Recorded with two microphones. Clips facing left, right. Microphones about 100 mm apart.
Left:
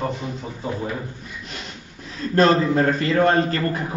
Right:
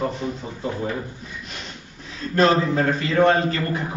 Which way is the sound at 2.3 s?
35° left (ahead or behind).